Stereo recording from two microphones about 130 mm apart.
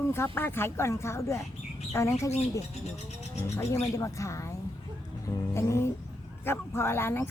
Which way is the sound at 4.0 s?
25° left (ahead or behind).